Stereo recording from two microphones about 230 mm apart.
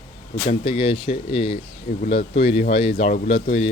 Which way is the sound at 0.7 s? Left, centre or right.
Left.